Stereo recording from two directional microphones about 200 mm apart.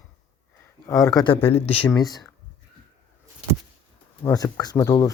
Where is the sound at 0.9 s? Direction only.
15° left (ahead or behind).